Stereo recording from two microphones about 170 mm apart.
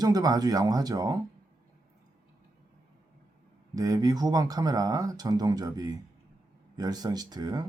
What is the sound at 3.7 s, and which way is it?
Speech, 20° right (ahead or behind).